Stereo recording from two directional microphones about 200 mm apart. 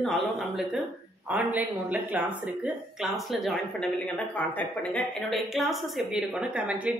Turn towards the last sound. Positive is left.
turn(degrees=-5)  # may be behind; listen again after turning